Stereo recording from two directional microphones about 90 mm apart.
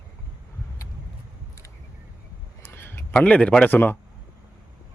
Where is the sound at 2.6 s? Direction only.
25° left (ahead or behind).